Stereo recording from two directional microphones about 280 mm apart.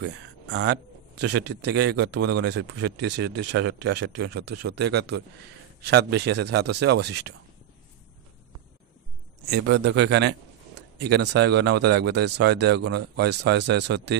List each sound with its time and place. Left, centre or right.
0.0 s a man's voice: right
9.5 s a man's voice: right